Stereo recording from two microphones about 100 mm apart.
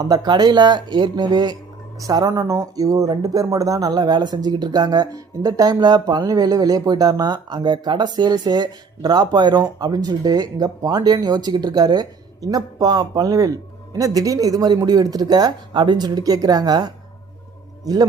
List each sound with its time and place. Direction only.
0.0 s speech: 40° right (ahead or behind)
2.0 s speech: 35° right (ahead or behind)